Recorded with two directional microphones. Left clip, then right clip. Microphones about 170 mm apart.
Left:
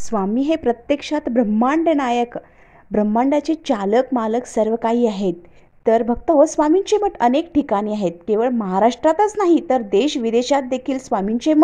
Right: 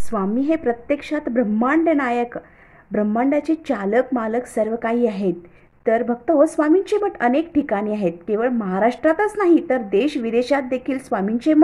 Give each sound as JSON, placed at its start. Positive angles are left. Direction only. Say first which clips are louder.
{"t": 0.1, "sound": "speech", "louder": "left 1 dB", "side_deg": 30}